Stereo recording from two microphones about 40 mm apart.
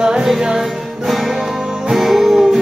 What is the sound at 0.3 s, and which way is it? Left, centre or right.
Music, centre.